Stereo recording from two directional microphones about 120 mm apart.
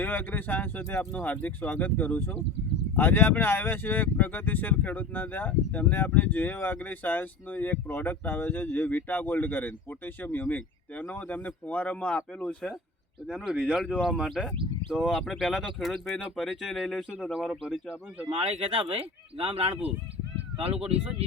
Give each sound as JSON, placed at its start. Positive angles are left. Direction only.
{"t": 0.0, "sound": "speech", "side_deg": 15}
{"t": 13.3, "sound": "speech", "side_deg": -5}
{"t": 18.3, "sound": "speech", "side_deg": -50}